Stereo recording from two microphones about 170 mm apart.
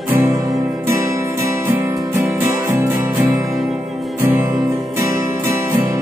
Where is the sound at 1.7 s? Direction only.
15° right (ahead or behind).